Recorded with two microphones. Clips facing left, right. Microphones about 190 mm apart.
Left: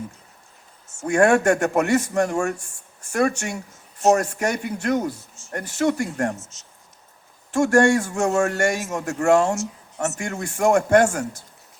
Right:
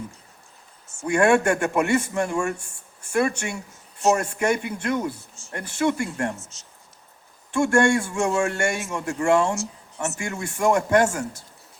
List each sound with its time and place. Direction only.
1.0 s a man's voice: 45° left (ahead or behind)
6.5 s speech: 30° right (ahead or behind)
7.5 s a man's voice: 40° left (ahead or behind)